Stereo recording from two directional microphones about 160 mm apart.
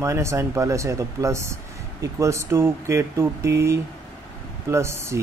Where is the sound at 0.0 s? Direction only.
20° right (ahead or behind).